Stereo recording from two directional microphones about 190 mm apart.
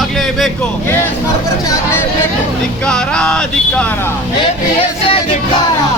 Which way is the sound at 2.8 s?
5° left (ahead or behind).